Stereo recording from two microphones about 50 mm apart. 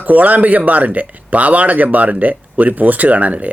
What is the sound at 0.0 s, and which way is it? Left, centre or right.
Speech, right.